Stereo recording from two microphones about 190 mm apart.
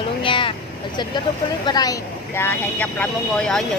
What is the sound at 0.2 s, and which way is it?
Vehicle, 25° left (ahead or behind).